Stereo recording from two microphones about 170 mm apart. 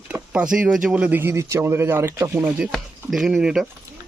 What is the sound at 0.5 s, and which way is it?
Speech, 5° right (ahead or behind).